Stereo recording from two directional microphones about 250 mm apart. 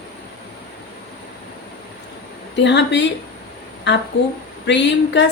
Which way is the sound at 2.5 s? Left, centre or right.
Left.